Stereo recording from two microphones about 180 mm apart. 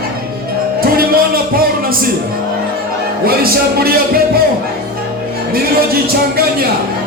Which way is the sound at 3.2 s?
55° right (ahead or behind).